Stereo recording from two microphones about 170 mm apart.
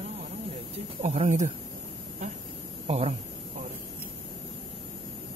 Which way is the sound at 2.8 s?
35° right (ahead or behind).